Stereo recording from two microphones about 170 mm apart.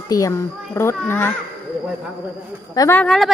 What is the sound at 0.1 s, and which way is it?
Speech, 20° left (ahead or behind).